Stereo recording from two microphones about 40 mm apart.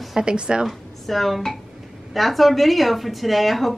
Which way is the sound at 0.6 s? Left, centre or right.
Centre.